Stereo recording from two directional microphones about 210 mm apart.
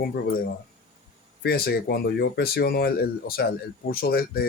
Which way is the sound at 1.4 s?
50° left (ahead or behind).